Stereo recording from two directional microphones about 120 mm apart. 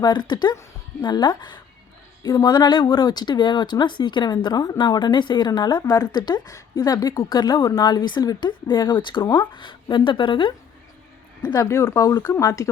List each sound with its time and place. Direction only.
0.0 s a woman's voice: 40° left (ahead or behind)
9.2 s speech: 20° left (ahead or behind)
9.5 s speech: 45° left (ahead or behind)
11.5 s speech: 30° left (ahead or behind)